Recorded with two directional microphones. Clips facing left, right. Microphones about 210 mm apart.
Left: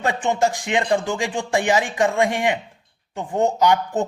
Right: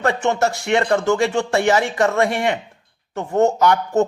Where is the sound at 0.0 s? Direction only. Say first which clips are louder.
Right 2 dB; 15° left (ahead or behind).